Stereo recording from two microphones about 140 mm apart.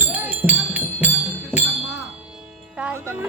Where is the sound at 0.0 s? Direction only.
10° right (ahead or behind).